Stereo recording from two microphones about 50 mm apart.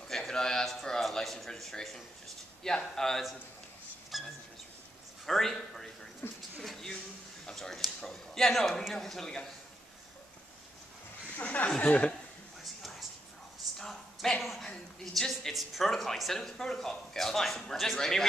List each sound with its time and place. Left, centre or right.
0.1 s speech: centre
4.1 s a sound: centre
5.2 s speech: centre
6.2 s a woman's voice: left
6.6 s a sound: centre
7.5 s speech: centre
11.3 s speech: left
13.7 s a sound: centre
14.4 s a woman's voice: centre